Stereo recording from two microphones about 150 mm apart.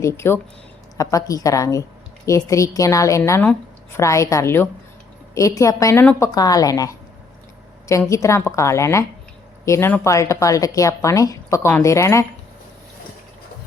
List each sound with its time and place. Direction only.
0.0 s speech: 15° left (ahead or behind)